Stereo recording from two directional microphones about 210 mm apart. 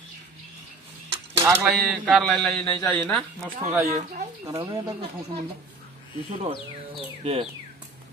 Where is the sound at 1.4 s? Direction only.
15° right (ahead or behind).